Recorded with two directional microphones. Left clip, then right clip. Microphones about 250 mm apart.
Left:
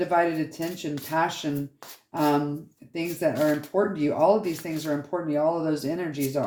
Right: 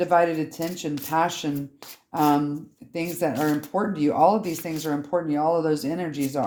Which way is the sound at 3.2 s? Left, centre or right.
Right.